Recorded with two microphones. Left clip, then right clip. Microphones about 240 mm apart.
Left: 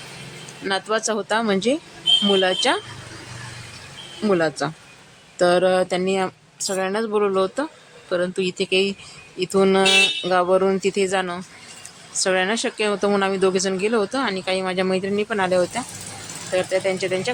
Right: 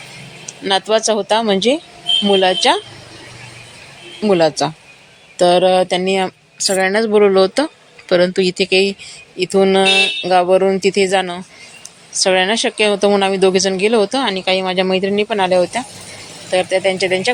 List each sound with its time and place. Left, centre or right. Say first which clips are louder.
0.6 s a woman's voice: right 8 dB; centre
4.2 s a woman's voice: right 7 dB; centre